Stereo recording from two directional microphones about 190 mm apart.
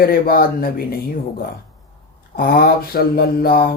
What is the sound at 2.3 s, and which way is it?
Speech, 50° left (ahead or behind).